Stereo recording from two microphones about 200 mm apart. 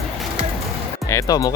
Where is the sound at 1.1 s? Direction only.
20° left (ahead or behind).